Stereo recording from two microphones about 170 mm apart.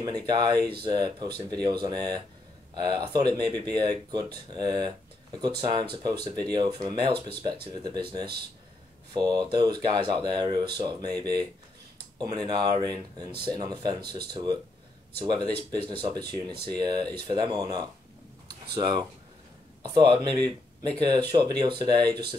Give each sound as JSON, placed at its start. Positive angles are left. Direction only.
{"t": 0.0, "sound": "speech", "side_deg": -25}
{"t": 19.8, "sound": "speech", "side_deg": -30}